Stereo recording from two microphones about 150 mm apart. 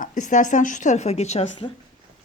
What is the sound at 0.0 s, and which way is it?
A woman's voice, 60° left (ahead or behind).